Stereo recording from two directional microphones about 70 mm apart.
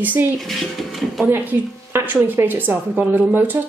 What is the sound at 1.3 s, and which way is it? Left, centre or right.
A woman's voice, right.